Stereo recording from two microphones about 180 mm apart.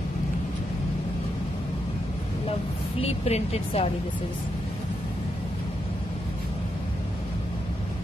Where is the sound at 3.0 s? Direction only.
35° left (ahead or behind).